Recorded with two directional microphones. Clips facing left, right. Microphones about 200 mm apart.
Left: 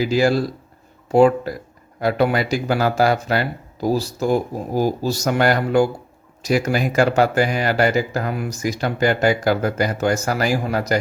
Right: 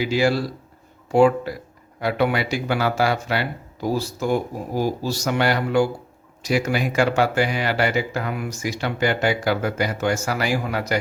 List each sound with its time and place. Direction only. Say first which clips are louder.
0.0 s speech: left 3 dB; 40° left (ahead or behind)